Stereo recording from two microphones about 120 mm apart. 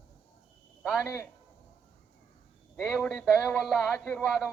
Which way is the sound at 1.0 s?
20° left (ahead or behind).